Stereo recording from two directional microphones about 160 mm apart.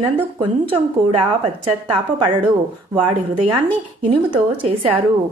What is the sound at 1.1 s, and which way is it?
A woman's voice, 35° right (ahead or behind).